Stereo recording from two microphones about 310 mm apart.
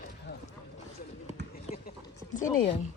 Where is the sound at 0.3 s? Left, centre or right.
Left.